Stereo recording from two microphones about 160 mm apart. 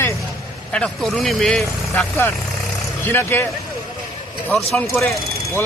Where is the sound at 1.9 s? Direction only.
10° left (ahead or behind).